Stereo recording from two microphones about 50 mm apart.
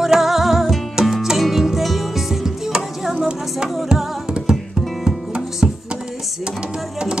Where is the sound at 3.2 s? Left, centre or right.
Centre.